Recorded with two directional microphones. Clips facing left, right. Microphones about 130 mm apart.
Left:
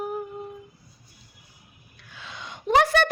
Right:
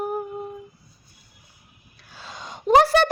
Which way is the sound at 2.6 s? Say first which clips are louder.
Right 4 dB; 35° right (ahead or behind).